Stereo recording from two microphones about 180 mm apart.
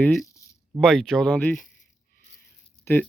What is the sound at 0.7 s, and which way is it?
Speech, centre (ahead or behind).